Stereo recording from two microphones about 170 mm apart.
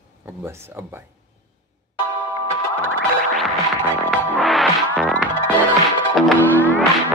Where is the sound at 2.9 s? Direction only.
Centre (ahead or behind).